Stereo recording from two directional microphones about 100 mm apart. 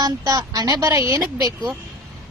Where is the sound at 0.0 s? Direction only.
40° right (ahead or behind).